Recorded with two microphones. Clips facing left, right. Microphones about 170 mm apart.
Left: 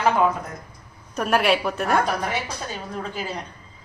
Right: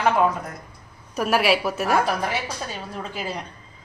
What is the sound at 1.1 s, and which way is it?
A woman's voice, 5° right (ahead or behind).